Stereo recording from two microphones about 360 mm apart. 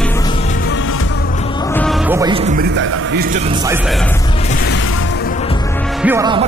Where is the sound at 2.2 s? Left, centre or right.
Centre.